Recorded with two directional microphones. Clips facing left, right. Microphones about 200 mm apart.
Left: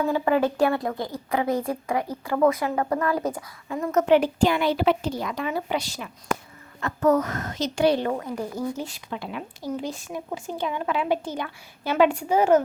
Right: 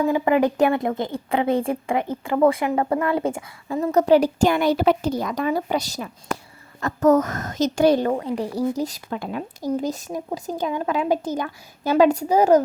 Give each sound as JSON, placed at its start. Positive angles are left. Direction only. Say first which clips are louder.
{"t": 0.0, "sound": "a woman's voice", "louder": "right 3 dB", "side_deg": -15}